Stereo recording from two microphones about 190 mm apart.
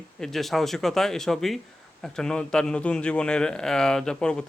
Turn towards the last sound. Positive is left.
turn(degrees=5)  # may be behind; listen again after turning